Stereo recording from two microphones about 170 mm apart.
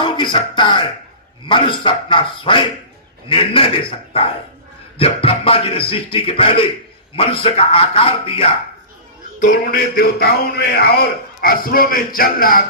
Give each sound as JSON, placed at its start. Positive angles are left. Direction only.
{"t": 0.0, "sound": "music", "side_deg": 30}
{"t": 1.5, "sound": "a man's voice", "side_deg": 30}
{"t": 4.9, "sound": "speech", "side_deg": 35}
{"t": 9.4, "sound": "speech", "side_deg": 60}